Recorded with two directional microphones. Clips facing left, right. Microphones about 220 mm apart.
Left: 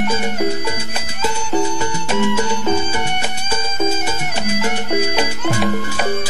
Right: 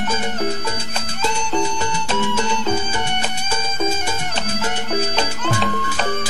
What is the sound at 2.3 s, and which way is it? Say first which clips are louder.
Music: left 3 dB; 10° left (ahead or behind).